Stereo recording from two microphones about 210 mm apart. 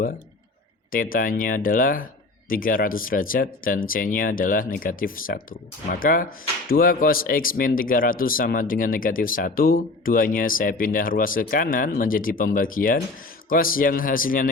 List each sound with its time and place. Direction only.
0.9 s speech: 40° left (ahead or behind)